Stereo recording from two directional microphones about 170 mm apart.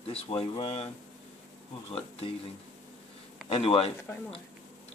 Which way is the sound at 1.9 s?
35° left (ahead or behind).